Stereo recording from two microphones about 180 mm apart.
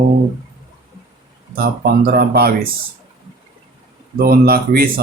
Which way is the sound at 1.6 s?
60° right (ahead or behind).